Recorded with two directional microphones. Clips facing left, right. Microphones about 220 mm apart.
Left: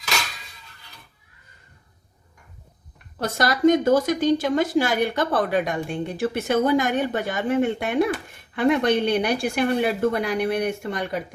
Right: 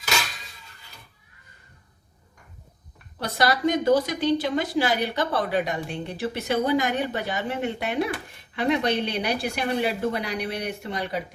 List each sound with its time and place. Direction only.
3.2 s a woman's voice: 45° left (ahead or behind)